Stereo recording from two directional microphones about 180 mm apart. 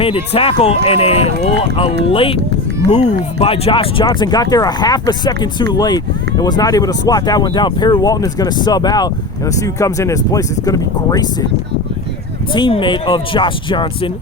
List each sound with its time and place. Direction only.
0.0 s speech: 30° left (ahead or behind)
12.5 s speech: 25° left (ahead or behind)